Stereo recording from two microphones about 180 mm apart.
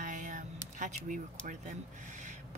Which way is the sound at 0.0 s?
45° right (ahead or behind).